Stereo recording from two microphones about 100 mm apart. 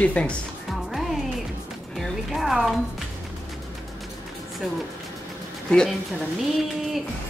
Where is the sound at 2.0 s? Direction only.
Centre (ahead or behind).